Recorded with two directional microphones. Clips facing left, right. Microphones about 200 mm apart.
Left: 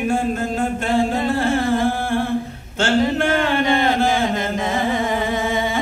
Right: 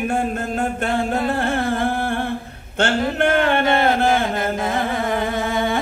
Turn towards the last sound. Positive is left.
turn(degrees=0)  # may be behind; listen again after turning